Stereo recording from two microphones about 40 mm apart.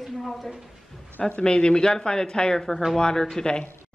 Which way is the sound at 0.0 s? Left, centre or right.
Centre.